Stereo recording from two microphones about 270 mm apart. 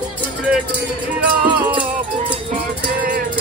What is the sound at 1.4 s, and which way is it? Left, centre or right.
Music, centre.